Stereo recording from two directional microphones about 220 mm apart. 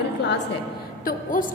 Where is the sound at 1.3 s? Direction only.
40° left (ahead or behind).